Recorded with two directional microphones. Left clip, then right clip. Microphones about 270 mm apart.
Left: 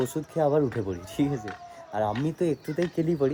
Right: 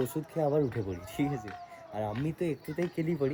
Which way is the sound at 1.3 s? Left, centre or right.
Left.